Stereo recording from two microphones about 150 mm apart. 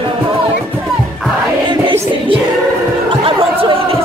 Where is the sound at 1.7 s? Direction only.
35° right (ahead or behind).